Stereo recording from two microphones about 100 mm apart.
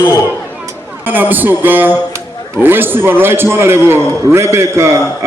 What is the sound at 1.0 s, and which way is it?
A man's voice, 20° right (ahead or behind).